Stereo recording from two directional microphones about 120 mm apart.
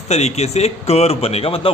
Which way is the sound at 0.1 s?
65° left (ahead or behind).